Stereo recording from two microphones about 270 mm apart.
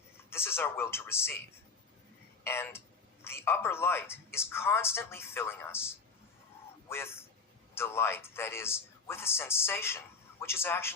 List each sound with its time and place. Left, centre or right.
0.3 s a man's voice: centre
2.4 s a man's voice: centre